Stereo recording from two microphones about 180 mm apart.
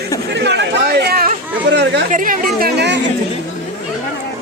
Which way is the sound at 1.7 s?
70° right (ahead or behind).